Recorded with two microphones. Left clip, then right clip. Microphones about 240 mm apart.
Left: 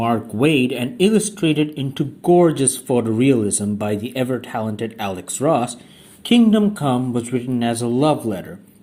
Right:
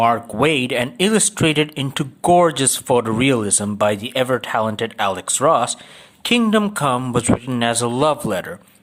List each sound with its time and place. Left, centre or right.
0.0 s speech: right